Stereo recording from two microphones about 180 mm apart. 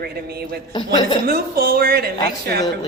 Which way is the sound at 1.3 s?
55° right (ahead or behind).